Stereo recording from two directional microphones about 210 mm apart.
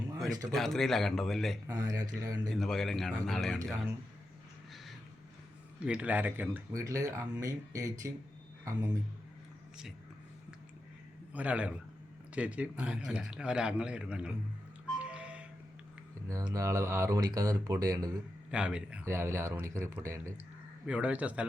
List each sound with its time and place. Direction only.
0.2 s a man's voice: centre (ahead or behind)
1.6 s speech: 15° right (ahead or behind)
2.5 s a man's voice: centre (ahead or behind)
5.8 s speech: 5° right (ahead or behind)
11.3 s a man's voice: 5° right (ahead or behind)
14.9 s music: 5° right (ahead or behind)
16.3 s speech: 15° right (ahead or behind)
18.5 s speech: 5° right (ahead or behind)